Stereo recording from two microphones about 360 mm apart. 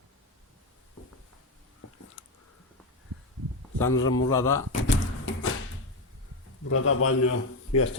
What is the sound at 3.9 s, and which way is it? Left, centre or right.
Speech, left.